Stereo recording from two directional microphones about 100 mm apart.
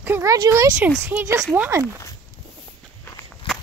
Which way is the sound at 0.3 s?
35° right (ahead or behind).